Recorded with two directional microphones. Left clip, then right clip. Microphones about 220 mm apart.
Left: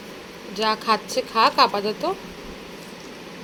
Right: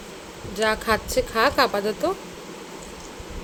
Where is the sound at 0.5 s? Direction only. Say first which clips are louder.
Left 1 dB; 20° right (ahead or behind).